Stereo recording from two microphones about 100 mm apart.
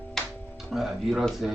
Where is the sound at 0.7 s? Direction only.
Centre (ahead or behind).